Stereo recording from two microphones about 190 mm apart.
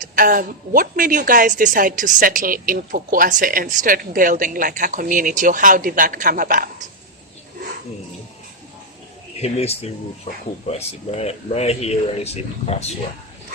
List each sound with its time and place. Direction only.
0.0 s a woman's voice: 45° right (ahead or behind)
9.4 s speech: 35° left (ahead or behind)